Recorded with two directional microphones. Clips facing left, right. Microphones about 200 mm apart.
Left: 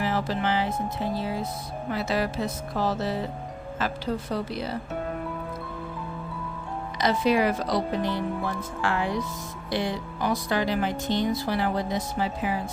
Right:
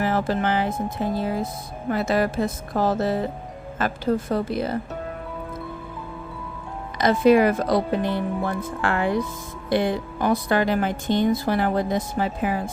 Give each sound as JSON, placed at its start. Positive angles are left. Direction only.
{"t": 0.0, "sound": "speech", "side_deg": -50}
{"t": 7.0, "sound": "speech", "side_deg": -50}